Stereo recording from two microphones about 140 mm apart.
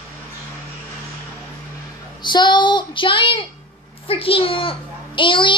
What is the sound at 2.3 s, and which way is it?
A child's voice, 35° left (ahead or behind).